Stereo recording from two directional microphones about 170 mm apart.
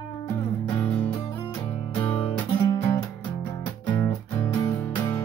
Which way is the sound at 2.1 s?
15° left (ahead or behind).